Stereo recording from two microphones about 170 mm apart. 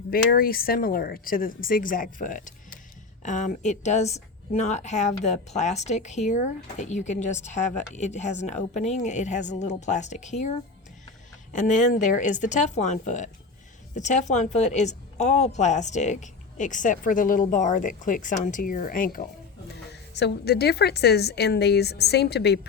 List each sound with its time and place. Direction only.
0.1 s speech: 60° left (ahead or behind)
19.9 s a woman's voice: 85° left